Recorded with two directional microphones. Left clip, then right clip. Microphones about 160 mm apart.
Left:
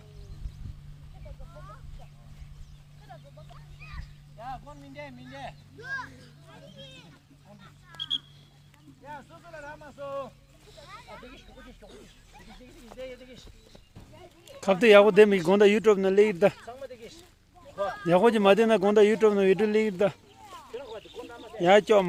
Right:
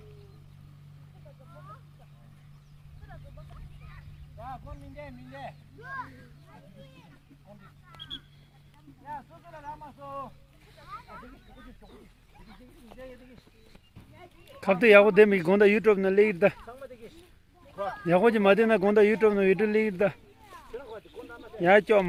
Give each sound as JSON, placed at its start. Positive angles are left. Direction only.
{"t": 5.8, "sound": "a child's voice", "side_deg": -40}
{"t": 10.0, "sound": "speech", "side_deg": -45}
{"t": 10.8, "sound": "a sound", "side_deg": -50}
{"t": 14.6, "sound": "a man's voice", "side_deg": 20}
{"t": 16.6, "sound": "a sound", "side_deg": -40}
{"t": 18.0, "sound": "a man's voice", "side_deg": 20}
{"t": 21.2, "sound": "bird", "side_deg": -25}
{"t": 21.6, "sound": "speech", "side_deg": 15}